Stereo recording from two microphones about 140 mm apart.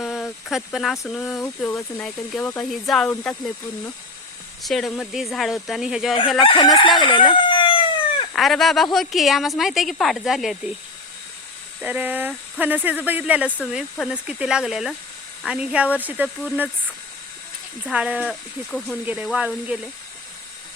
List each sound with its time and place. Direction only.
0.0 s speech: centre (ahead or behind)
2.6 s speech: centre (ahead or behind)
4.6 s speech: centre (ahead or behind)
6.4 s chicken: 35° left (ahead or behind)
7.0 s crowing: 35° left (ahead or behind)
8.3 s speech: centre (ahead or behind)
11.8 s speech: 10° right (ahead or behind)
17.9 s speech: 10° right (ahead or behind)
18.3 s speech: 5° left (ahead or behind)
19.0 s speech: 10° right (ahead or behind)